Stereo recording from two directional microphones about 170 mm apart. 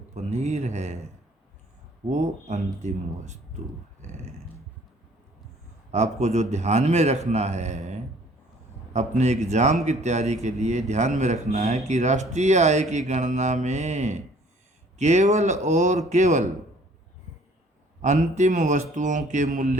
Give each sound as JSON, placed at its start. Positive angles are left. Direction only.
{"t": 0.1, "sound": "a man's voice", "side_deg": -40}
{"t": 5.9, "sound": "a man's voice", "side_deg": -40}
{"t": 18.0, "sound": "a man's voice", "side_deg": -45}